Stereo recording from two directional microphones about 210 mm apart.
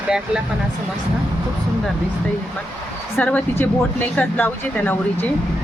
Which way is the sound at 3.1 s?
10° left (ahead or behind).